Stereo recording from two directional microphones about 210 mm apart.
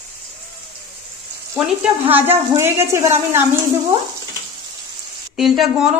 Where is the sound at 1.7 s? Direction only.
10° right (ahead or behind).